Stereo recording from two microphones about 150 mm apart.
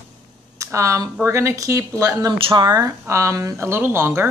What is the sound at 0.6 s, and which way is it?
Speech, 20° right (ahead or behind).